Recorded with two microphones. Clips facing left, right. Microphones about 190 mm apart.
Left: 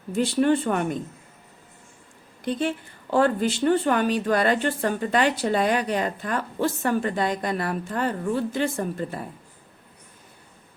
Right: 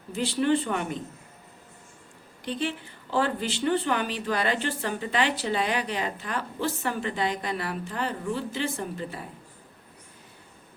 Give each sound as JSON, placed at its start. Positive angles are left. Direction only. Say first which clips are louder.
{"t": 0.2, "sound": "speech", "louder": "left 4 dB", "side_deg": 50}
{"t": 2.4, "sound": "speech", "louder": "left 5 dB", "side_deg": 50}